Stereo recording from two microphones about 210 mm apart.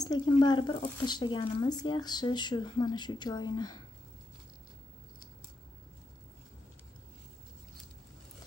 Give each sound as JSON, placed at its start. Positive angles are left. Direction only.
{"t": 0.0, "sound": "speech", "side_deg": 20}